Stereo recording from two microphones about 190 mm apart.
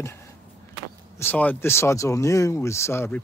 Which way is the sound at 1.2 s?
10° left (ahead or behind).